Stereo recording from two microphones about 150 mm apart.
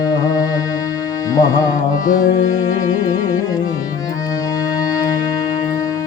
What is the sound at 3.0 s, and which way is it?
Music, 25° left (ahead or behind).